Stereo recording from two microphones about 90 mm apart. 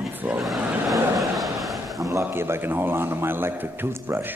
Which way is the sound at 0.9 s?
40° right (ahead or behind).